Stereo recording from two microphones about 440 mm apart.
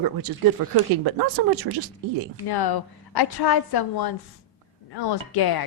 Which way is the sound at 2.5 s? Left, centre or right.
Left.